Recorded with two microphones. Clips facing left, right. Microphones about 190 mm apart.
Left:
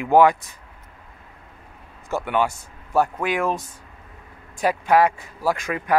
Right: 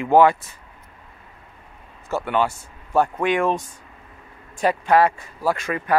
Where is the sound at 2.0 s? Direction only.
15° left (ahead or behind).